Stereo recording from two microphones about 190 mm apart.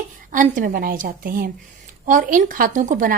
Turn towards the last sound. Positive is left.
turn(degrees=-45)  # may be behind; listen again after turning